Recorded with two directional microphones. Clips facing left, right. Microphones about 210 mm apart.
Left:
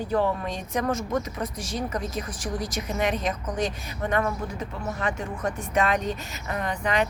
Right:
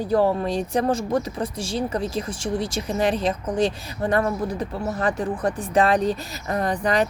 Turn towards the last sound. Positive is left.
turn(degrees=-35)  # may be behind; listen again after turning